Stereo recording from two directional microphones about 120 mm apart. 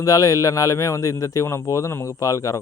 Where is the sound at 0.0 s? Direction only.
30° left (ahead or behind).